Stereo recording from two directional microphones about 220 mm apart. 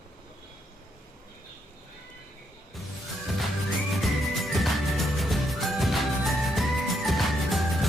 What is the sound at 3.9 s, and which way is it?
Music, centre (ahead or behind).